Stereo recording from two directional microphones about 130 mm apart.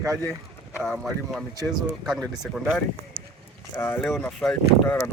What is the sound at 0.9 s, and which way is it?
Speech, centre (ahead or behind).